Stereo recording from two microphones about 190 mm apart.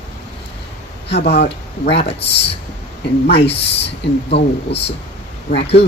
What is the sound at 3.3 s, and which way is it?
Speech, 60° left (ahead or behind).